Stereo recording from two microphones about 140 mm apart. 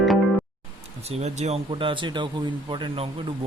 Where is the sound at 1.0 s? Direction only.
50° right (ahead or behind).